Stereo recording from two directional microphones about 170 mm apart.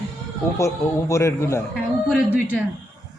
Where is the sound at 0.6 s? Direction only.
15° left (ahead or behind).